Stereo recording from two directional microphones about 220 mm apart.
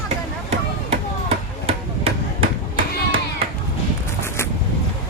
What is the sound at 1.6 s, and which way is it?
Chop, 25° right (ahead or behind).